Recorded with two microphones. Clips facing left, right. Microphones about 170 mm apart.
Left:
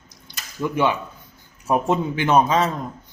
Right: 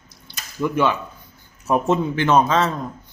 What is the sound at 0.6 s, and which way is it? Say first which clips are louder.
A man's voice: right 1 dB; 15° left (ahead or behind).